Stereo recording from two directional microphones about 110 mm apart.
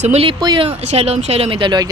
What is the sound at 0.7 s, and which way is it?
Speech, 75° right (ahead or behind).